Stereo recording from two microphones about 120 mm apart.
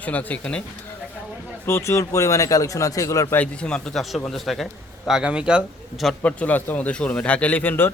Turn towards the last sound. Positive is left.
turn(degrees=15)  # may be behind; listen again after turning